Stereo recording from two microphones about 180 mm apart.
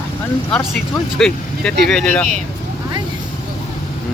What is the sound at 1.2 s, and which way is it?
Speech, centre (ahead or behind).